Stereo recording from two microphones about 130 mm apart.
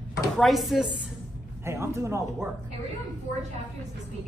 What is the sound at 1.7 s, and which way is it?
Speech, 20° right (ahead or behind).